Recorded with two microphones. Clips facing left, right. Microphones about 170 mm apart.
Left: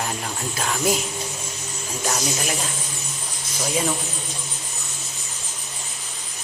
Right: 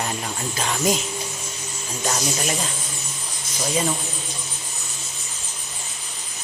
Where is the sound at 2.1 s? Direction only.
Centre (ahead or behind).